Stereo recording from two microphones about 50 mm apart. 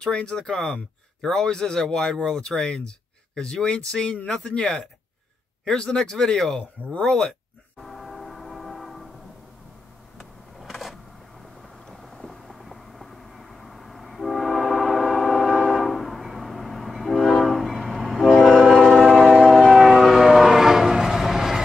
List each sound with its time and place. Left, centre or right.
0.0 s speech: centre
7.8 s train: centre
10.7 s a sound: centre
11.9 s vehicle: centre
18.3 s train: centre
19.0 s train: centre
19.4 s train: centre